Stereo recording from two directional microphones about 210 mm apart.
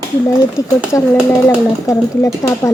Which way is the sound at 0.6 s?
15° left (ahead or behind).